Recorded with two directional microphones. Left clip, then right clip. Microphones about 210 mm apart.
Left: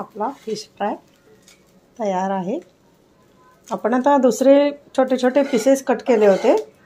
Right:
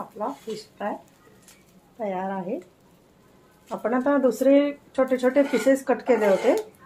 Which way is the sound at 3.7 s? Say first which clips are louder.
Left 7 dB; 45° left (ahead or behind).